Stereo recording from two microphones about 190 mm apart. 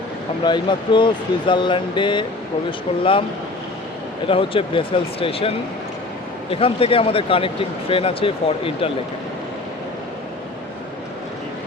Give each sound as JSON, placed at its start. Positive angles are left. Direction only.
{"t": 0.4, "sound": "speech", "side_deg": 25}
{"t": 4.3, "sound": "speech", "side_deg": 30}